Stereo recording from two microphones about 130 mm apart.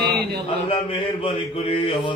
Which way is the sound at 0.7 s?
45° left (ahead or behind).